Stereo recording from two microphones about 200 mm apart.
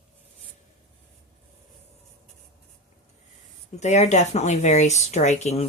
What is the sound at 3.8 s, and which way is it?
Speech, 35° left (ahead or behind).